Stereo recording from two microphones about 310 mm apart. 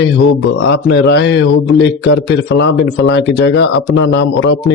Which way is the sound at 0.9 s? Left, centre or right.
Left.